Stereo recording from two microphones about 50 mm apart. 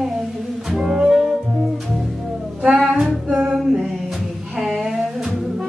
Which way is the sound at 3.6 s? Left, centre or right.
Centre.